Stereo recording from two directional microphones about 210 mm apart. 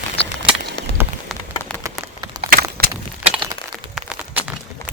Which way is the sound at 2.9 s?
5° right (ahead or behind).